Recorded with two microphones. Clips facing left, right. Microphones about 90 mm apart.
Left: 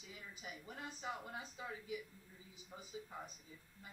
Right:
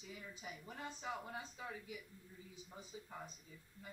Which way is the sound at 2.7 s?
10° left (ahead or behind).